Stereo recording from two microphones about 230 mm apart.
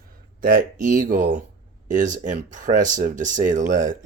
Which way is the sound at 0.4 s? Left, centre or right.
Right.